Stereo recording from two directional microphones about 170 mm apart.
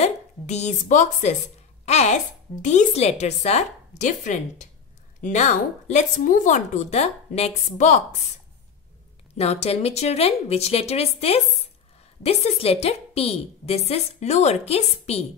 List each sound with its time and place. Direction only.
0.0 s a woman's voice: 40° left (ahead or behind)
9.4 s a woman's voice: 35° left (ahead or behind)